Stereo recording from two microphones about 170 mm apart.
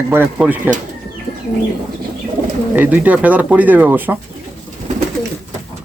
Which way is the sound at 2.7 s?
10° right (ahead or behind).